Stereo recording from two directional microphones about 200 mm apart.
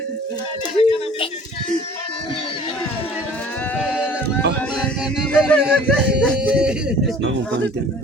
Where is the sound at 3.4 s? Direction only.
10° left (ahead or behind).